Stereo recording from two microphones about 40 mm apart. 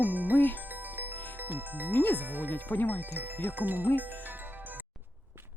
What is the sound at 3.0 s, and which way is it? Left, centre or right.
Music, right.